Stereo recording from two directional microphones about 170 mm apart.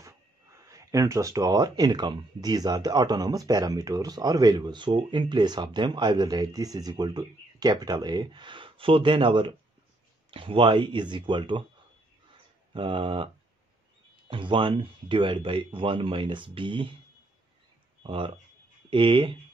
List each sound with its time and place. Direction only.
0.7 s speech: 20° right (ahead or behind)
12.7 s speech: 30° right (ahead or behind)
14.3 s speech: 30° right (ahead or behind)
18.0 s speech: 30° right (ahead or behind)